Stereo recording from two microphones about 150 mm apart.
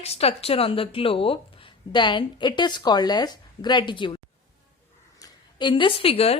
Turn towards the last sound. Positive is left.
turn(degrees=40)  # may be behind; listen again after turning